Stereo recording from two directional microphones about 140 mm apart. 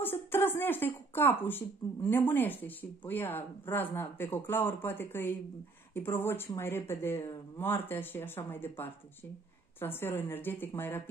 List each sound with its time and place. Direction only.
0.0 s speech: 15° left (ahead or behind)